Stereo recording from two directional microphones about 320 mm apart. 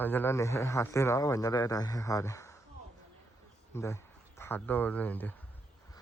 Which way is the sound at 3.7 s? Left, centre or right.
Centre.